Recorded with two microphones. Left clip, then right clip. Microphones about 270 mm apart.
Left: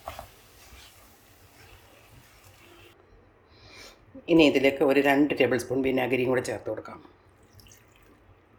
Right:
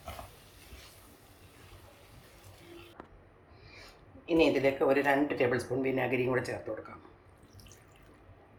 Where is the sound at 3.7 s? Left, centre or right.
Left.